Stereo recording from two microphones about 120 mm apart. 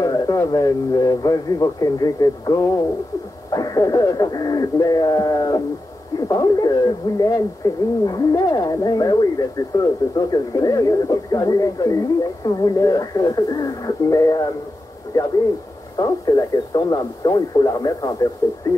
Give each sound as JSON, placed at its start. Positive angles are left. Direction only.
{"t": 0.0, "sound": "speech", "side_deg": 30}